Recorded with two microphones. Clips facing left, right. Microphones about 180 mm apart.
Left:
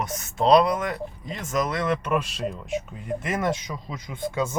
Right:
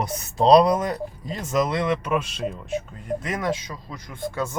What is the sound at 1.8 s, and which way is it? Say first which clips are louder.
Speech: right 1 dB; 5° right (ahead or behind).